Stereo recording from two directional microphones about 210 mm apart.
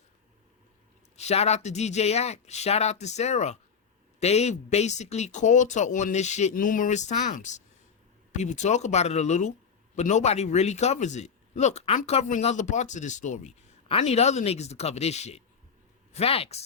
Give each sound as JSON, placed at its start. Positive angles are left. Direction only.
{"t": 1.1, "sound": "a man's voice", "side_deg": 30}